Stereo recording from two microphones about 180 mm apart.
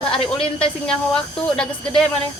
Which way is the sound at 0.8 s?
5° left (ahead or behind).